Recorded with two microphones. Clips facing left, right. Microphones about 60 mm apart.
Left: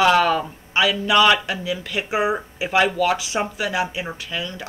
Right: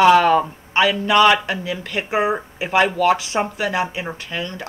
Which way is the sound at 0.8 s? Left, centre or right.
Right.